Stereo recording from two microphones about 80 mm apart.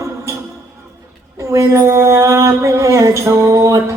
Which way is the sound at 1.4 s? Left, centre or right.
Right.